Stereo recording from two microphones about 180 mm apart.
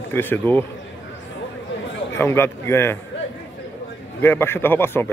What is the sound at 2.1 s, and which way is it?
Speech, 15° left (ahead or behind).